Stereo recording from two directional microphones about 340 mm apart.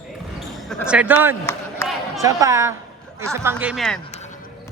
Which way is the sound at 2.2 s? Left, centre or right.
Centre.